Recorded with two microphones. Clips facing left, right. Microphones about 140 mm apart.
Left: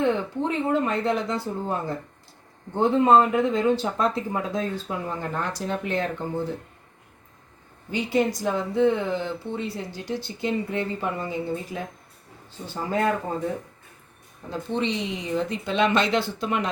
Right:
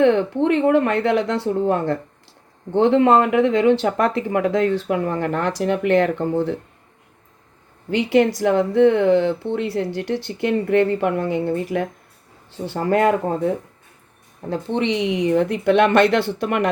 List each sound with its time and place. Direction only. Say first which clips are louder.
0.0 s speech: right 8 dB; 75° right (ahead or behind)
7.9 s speech: right 7 dB; 80° right
14.5 s speech: right 5 dB; 70° right (ahead or behind)